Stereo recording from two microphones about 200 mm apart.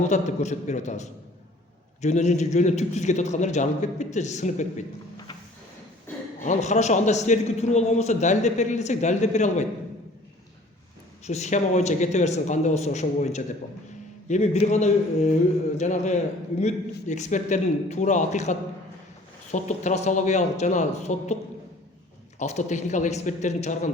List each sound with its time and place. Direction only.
0.0 s a man's voice: 35° left (ahead or behind)
6.4 s a man's voice: 35° left (ahead or behind)
11.3 s a man's voice: 35° left (ahead or behind)
22.4 s a man's voice: 35° left (ahead or behind)